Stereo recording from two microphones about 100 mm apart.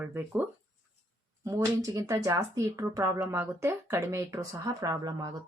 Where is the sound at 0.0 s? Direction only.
15° right (ahead or behind).